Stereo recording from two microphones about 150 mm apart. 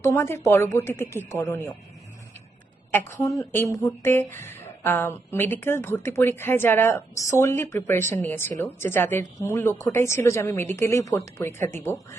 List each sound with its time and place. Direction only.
0.0 s speech: 15° left (ahead or behind)
2.9 s speech: 20° left (ahead or behind)